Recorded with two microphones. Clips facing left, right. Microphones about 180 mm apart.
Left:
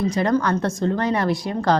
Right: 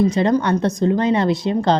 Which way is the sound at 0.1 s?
20° right (ahead or behind).